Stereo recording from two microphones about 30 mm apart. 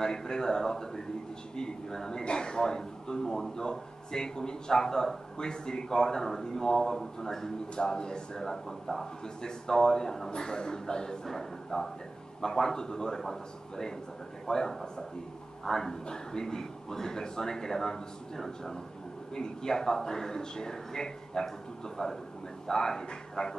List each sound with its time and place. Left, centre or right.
0.0 s speech: left
10.3 s speech: left
11.2 s speech: centre